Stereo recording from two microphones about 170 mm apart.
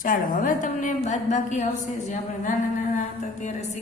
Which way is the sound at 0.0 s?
55° left (ahead or behind).